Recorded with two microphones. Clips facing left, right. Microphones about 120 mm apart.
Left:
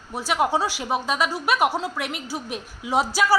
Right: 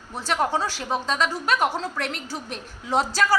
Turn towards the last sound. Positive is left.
turn(degrees=5)  # may be behind; listen again after turning